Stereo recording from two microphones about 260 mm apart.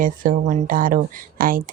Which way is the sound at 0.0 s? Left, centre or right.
Right.